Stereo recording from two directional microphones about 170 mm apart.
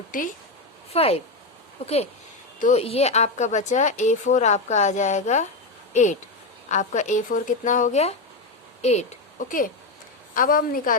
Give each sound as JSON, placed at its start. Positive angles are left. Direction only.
{"t": 0.1, "sound": "speech", "side_deg": 55}
{"t": 0.9, "sound": "speech", "side_deg": 35}
{"t": 2.6, "sound": "a woman's voice", "side_deg": 40}